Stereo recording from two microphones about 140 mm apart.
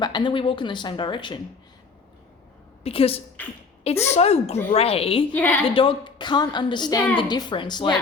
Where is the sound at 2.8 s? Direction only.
45° left (ahead or behind).